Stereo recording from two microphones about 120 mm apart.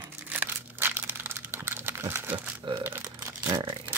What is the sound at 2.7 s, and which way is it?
Speech, 45° right (ahead or behind).